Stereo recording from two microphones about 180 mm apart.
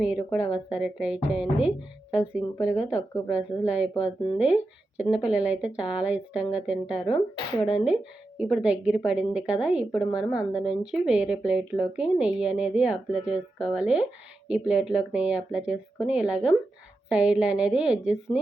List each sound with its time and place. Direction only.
0.0 s a woman's voice: 5° right (ahead or behind)
7.1 s speech: 30° left (ahead or behind)
8.4 s a woman's voice: 5° right (ahead or behind)